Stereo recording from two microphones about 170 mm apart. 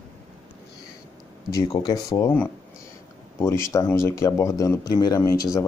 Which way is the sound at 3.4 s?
15° left (ahead or behind).